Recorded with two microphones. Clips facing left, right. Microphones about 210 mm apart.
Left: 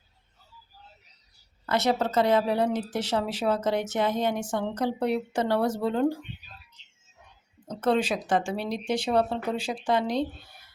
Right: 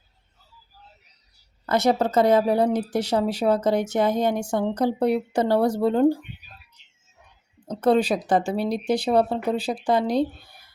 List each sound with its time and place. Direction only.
2.2 s speech: 45° right (ahead or behind)
7.7 s speech: 35° right (ahead or behind)